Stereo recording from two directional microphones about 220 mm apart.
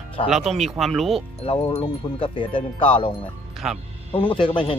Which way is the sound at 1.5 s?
20° left (ahead or behind).